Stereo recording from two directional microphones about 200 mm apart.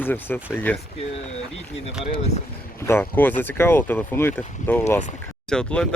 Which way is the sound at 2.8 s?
10° left (ahead or behind).